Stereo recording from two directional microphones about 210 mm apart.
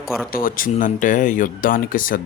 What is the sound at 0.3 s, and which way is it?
Speech, 45° left (ahead or behind).